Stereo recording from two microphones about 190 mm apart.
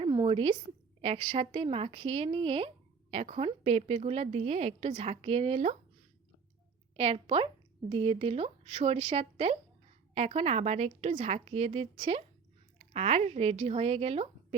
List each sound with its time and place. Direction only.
0.0 s a sound: 25° right (ahead or behind)
1.0 s speech: 30° right (ahead or behind)
6.9 s speech: 30° right (ahead or behind)